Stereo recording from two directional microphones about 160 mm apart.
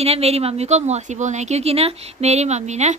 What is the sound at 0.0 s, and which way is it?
A woman's voice, 40° right (ahead or behind).